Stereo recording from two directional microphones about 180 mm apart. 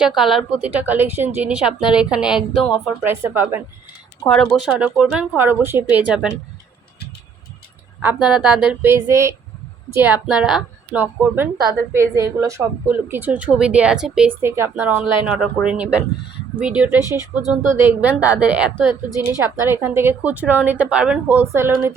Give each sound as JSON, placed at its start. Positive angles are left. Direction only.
{"t": 0.2, "sound": "a woman's voice", "side_deg": 0}
{"t": 4.3, "sound": "a woman's voice", "side_deg": 5}
{"t": 4.8, "sound": "speech", "side_deg": -10}
{"t": 8.0, "sound": "a woman's voice", "side_deg": -5}
{"t": 17.7, "sound": "speech", "side_deg": -10}